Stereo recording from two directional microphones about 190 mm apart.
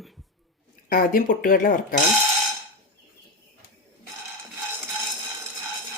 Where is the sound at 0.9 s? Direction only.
50° left (ahead or behind).